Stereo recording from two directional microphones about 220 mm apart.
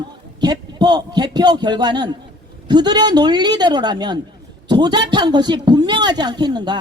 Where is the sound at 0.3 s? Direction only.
20° right (ahead or behind).